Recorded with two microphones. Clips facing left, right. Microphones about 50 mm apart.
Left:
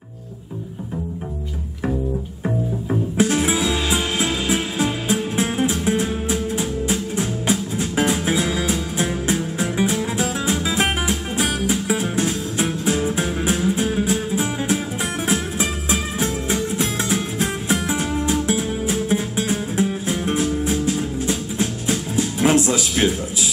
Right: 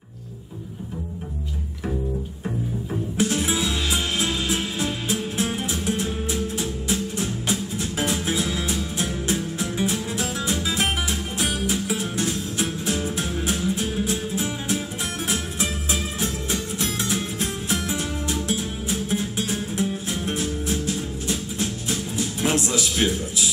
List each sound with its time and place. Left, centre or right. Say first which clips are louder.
2.4 s music: left 7 dB; left